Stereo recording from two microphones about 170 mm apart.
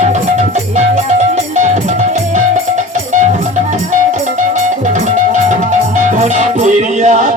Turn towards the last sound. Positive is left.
turn(degrees=-45)  # may be behind; listen again after turning